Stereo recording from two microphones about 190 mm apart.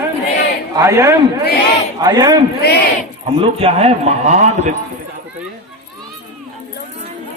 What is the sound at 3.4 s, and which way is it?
Speech, 30° right (ahead or behind).